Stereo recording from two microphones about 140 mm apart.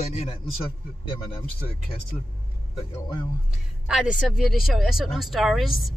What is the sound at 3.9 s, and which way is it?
Speech, 5° right (ahead or behind).